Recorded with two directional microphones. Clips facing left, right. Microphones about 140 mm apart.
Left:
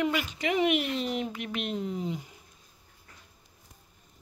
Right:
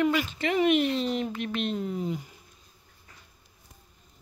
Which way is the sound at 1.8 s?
20° left (ahead or behind).